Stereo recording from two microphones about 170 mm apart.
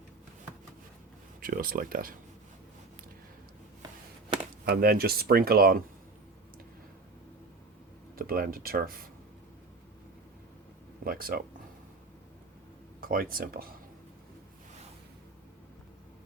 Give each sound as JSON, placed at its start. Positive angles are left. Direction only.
{"t": 1.4, "sound": "speech", "side_deg": -55}
{"t": 4.7, "sound": "speech", "side_deg": -65}
{"t": 8.1, "sound": "speech", "side_deg": -60}
{"t": 11.0, "sound": "speech", "side_deg": -60}
{"t": 13.0, "sound": "speech", "side_deg": -55}